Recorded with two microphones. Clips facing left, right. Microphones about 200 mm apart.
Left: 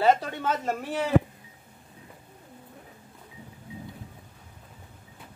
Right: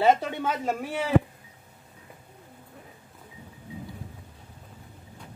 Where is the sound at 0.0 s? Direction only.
10° right (ahead or behind).